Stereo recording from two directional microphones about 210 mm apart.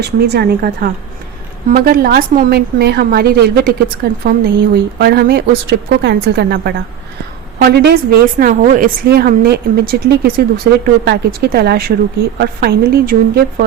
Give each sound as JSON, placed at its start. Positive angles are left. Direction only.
{"t": 0.0, "sound": "a woman's voice", "side_deg": -50}
{"t": 8.4, "sound": "a woman's voice", "side_deg": -40}